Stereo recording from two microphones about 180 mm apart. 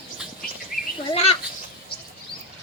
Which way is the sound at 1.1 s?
35° left (ahead or behind).